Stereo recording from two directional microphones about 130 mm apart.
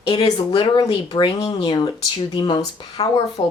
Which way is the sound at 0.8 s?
30° left (ahead or behind).